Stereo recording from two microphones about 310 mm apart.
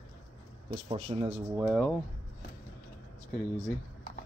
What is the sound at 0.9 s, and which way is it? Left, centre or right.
Speech, centre.